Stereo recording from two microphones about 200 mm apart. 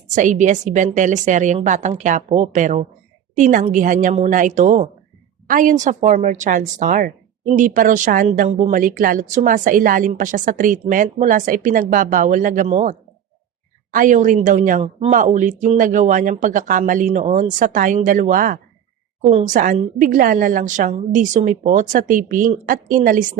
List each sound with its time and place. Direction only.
0.1 s a woman's voice: 40° right (ahead or behind)